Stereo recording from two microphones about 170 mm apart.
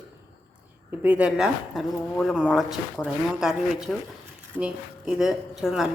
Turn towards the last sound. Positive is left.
turn(degrees=0)  # may be behind; listen again after turning